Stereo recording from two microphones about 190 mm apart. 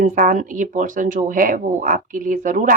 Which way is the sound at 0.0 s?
45° right (ahead or behind).